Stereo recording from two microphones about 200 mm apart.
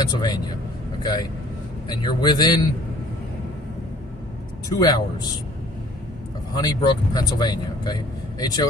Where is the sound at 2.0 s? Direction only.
20° left (ahead or behind).